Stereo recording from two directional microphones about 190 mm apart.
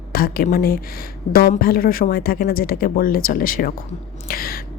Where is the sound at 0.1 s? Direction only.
50° left (ahead or behind).